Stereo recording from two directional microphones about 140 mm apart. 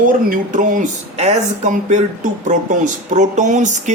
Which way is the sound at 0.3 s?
70° right (ahead or behind).